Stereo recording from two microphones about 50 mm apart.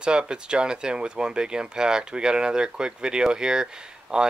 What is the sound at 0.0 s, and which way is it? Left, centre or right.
Speech, centre.